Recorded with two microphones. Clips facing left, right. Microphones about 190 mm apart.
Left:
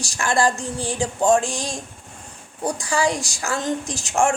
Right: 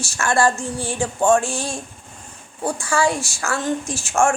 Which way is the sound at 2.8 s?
15° left (ahead or behind).